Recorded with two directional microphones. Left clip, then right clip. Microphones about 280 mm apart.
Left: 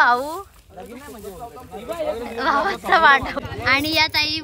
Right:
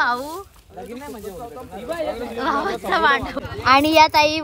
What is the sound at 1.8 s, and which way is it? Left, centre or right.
Speech, centre.